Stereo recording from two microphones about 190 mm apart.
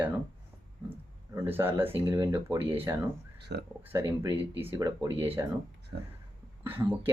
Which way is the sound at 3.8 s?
10° right (ahead or behind).